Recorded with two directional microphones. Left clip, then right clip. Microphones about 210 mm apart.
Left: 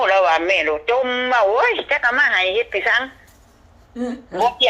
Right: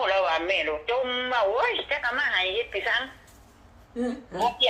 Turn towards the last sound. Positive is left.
turn(degrees=50)  # may be behind; listen again after turning